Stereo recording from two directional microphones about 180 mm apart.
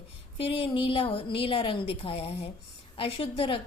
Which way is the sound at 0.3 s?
30° left (ahead or behind).